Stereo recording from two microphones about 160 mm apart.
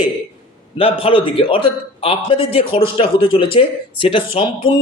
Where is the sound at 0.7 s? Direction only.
35° left (ahead or behind).